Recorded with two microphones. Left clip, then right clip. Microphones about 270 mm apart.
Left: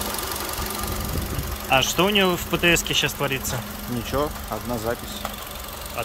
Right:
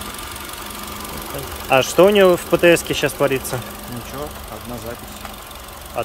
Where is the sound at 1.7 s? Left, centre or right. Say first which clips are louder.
Right 7 dB; centre.